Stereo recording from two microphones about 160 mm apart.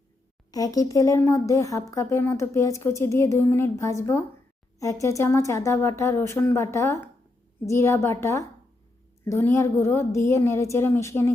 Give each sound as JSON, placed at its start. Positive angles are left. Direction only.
{"t": 0.5, "sound": "speech", "side_deg": 20}